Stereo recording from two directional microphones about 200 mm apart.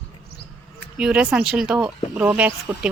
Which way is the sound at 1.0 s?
5° right (ahead or behind).